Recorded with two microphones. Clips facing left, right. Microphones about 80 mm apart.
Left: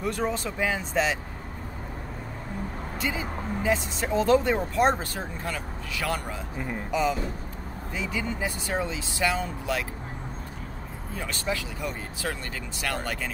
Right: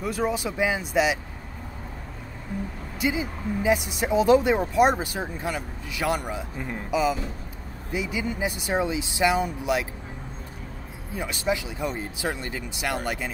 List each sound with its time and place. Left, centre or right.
0.0 s speech: centre
3.0 s speech: centre
6.9 s speech: centre
11.1 s speech: centre